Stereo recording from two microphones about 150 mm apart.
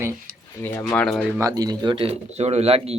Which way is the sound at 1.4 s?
25° right (ahead or behind).